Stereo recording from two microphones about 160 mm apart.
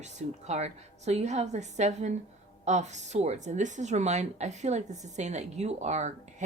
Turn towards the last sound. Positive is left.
turn(degrees=-45)  # may be behind; listen again after turning